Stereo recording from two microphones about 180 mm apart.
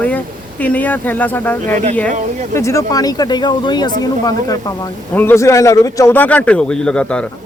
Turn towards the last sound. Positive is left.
turn(degrees=5)  # may be behind; listen again after turning